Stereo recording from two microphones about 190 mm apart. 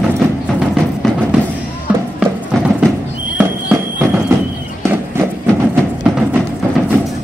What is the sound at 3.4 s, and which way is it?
Fire alarm, 10° right (ahead or behind).